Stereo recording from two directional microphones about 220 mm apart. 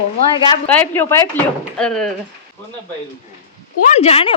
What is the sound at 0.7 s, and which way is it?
Speech, 10° left (ahead or behind).